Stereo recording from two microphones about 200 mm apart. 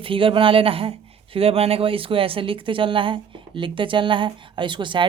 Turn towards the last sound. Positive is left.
turn(degrees=-25)  # may be behind; listen again after turning